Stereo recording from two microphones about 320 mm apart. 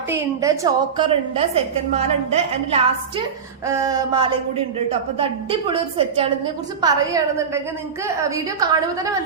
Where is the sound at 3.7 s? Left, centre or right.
Centre.